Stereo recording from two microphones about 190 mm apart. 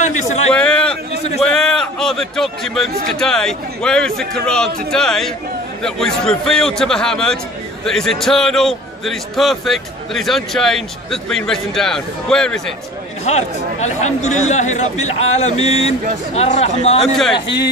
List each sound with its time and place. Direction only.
0.5 s a sound: 5° left (ahead or behind)
1.4 s a man's voice: 5° left (ahead or behind)
13.2 s speech: 35° left (ahead or behind)
17.0 s a man's voice: centre (ahead or behind)